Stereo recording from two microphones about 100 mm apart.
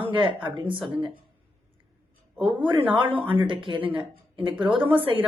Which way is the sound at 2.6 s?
60° right (ahead or behind).